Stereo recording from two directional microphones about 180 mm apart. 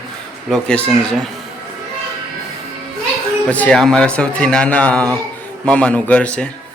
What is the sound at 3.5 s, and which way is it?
Speech, 5° left (ahead or behind).